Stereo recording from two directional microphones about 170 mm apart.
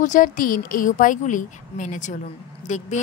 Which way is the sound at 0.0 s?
50° left (ahead or behind).